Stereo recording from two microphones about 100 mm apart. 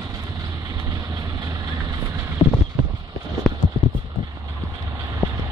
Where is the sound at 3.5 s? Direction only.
Centre (ahead or behind).